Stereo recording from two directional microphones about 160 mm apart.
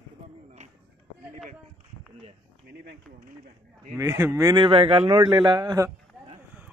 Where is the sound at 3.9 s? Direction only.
15° right (ahead or behind).